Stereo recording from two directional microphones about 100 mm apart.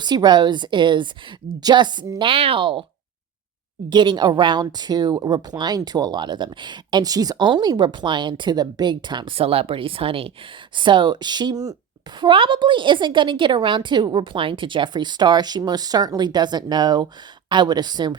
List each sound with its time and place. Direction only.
0.0 s speech: 45° right (ahead or behind)
2.1 s speech: 60° right (ahead or behind)
3.8 s speech: 50° right (ahead or behind)
9.3 s speech: 75° right (ahead or behind)
10.8 s speech: 50° right (ahead or behind)
12.2 s speech: 55° right (ahead or behind)